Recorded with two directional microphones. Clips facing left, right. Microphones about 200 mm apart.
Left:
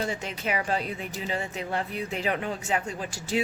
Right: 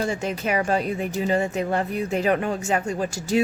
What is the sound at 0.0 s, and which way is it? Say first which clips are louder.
Speech: right 5 dB; 45° right (ahead or behind).